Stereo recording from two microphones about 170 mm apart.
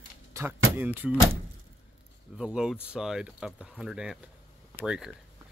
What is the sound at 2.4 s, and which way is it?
Speech, 5° right (ahead or behind).